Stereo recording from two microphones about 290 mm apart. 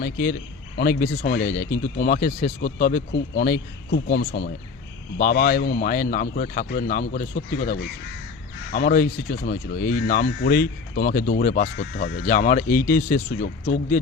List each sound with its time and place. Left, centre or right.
0.0 s speech: left